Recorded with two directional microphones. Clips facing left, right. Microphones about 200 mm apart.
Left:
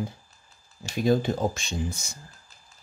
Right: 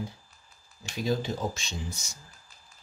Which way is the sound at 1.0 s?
55° left (ahead or behind).